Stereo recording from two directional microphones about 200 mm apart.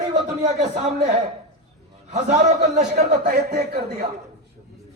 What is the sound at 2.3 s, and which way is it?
Speech, 35° right (ahead or behind).